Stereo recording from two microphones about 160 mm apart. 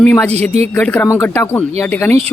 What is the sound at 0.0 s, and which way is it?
Speech, 10° left (ahead or behind).